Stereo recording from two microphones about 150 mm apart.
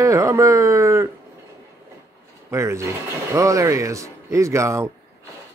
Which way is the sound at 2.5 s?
20° right (ahead or behind).